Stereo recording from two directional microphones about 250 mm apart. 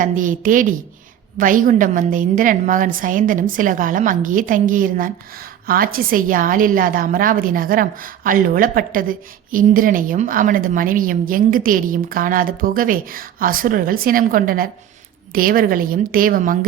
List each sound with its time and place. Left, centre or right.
0.0 s a woman's voice: right